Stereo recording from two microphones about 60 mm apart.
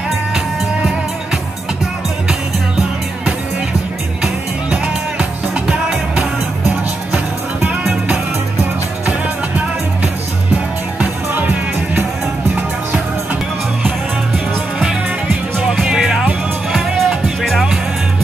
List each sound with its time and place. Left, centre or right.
5.7 s music: centre
11.0 s music: right
15.6 s music: centre